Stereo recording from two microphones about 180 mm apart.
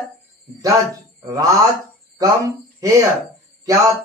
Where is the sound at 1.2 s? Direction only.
20° right (ahead or behind).